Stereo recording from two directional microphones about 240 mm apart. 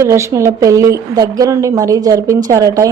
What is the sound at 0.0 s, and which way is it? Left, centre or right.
Speech, centre.